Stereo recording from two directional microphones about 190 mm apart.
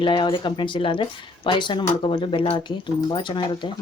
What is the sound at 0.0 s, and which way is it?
Speech, 25° left (ahead or behind).